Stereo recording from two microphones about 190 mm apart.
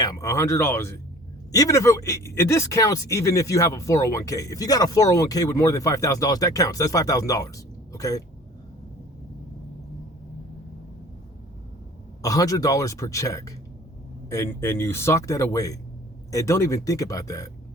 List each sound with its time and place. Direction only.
0.0 s speech: 20° left (ahead or behind)
12.2 s speech: 20° left (ahead or behind)